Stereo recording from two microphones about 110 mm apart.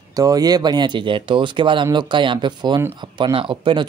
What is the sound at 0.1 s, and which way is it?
Speech, 35° right (ahead or behind).